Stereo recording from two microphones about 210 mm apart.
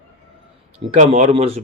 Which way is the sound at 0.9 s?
35° right (ahead or behind).